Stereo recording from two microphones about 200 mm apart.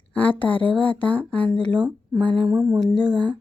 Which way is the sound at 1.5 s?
25° right (ahead or behind).